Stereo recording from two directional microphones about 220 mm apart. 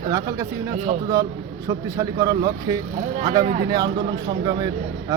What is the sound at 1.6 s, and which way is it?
Speech, 15° right (ahead or behind).